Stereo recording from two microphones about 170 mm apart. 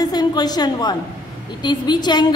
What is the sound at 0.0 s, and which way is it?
A woman's voice, 25° left (ahead or behind).